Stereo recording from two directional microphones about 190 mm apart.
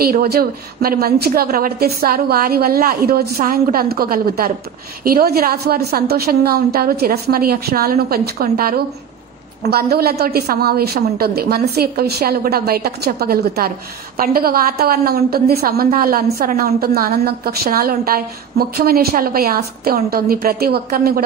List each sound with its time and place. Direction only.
0.0 s a woman's voice: 55° right (ahead or behind)